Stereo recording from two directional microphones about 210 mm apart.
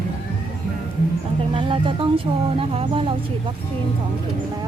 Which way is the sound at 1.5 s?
25° right (ahead or behind).